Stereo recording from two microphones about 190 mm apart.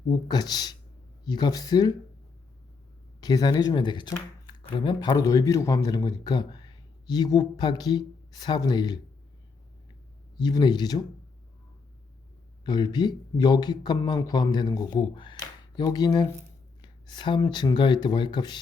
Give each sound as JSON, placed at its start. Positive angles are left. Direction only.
{"t": 0.1, "sound": "speech", "side_deg": 20}
{"t": 3.2, "sound": "speech", "side_deg": 20}
{"t": 10.3, "sound": "speech", "side_deg": 20}
{"t": 12.6, "sound": "speech", "side_deg": 20}